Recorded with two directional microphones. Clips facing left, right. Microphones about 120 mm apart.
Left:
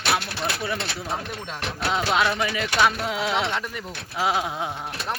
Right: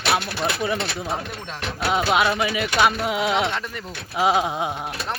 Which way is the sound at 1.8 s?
15° right (ahead or behind).